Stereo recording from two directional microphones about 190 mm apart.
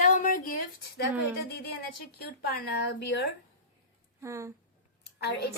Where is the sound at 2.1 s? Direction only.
60° left (ahead or behind).